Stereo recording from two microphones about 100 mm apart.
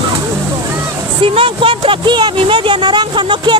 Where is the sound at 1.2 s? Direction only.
65° right (ahead or behind).